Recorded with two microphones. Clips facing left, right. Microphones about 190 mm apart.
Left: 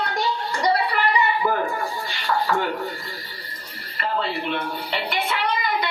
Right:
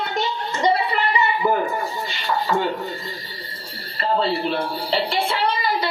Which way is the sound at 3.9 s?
30° right (ahead or behind).